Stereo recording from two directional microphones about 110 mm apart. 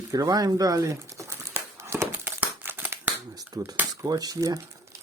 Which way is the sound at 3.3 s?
35° right (ahead or behind).